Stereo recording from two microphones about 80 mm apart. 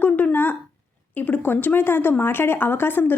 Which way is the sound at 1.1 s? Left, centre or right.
Left.